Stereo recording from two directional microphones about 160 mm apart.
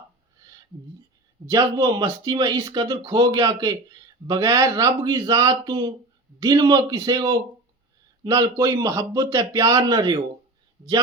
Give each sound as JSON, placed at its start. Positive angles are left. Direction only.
{"t": 1.5, "sound": "speech", "side_deg": -25}